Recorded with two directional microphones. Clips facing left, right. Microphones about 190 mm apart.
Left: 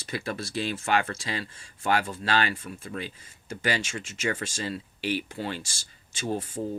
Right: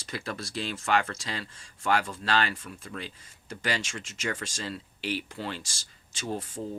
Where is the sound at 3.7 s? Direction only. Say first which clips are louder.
Left 3 dB; 10° left (ahead or behind).